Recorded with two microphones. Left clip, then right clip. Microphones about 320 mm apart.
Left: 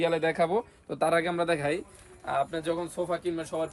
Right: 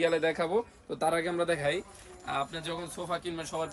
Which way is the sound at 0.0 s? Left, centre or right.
Left.